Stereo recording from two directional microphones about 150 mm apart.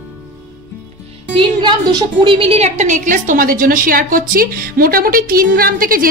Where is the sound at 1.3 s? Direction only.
30° right (ahead or behind); by 6.1 s 75° right (ahead or behind).